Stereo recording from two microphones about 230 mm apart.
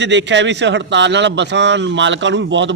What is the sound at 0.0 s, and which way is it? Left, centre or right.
A man's voice, right.